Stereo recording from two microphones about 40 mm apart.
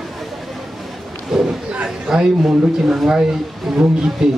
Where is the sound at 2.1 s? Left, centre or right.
Centre.